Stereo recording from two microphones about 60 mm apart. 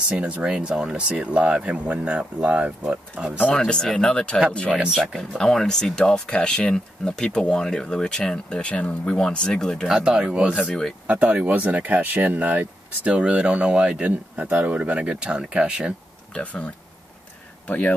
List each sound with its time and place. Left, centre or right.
0.1 s speech: centre
3.5 s speech: centre
4.6 s speech: centre
5.3 s speech: centre
9.8 s speech: centre
16.3 s speech: centre